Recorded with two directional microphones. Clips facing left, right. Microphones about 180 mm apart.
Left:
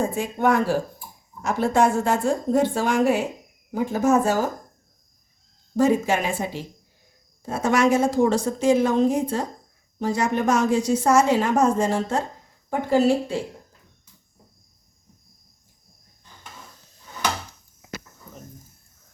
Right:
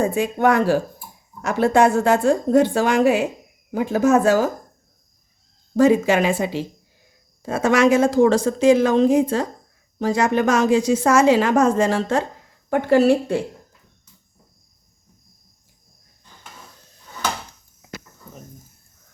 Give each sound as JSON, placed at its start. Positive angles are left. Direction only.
{"t": 0.0, "sound": "a woman's voice", "side_deg": -75}
{"t": 5.7, "sound": "speech", "side_deg": -90}
{"t": 12.7, "sound": "a woman's voice", "side_deg": -70}